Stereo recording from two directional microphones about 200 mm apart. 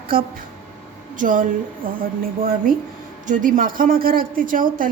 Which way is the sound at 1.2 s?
40° right (ahead or behind).